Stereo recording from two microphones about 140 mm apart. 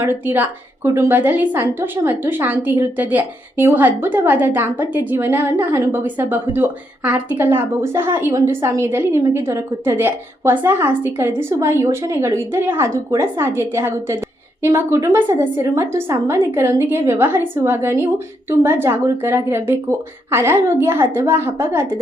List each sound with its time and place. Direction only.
0.0 s a woman's voice: 15° right (ahead or behind)